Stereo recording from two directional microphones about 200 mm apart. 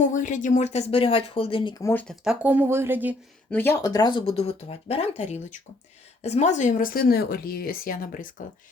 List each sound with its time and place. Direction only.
0.0 s speech: 40° left (ahead or behind)
1.8 s speech: 10° left (ahead or behind)
2.2 s speech: 5° right (ahead or behind)
3.5 s speech: 10° left (ahead or behind); by 8.4 s 45° left (ahead or behind)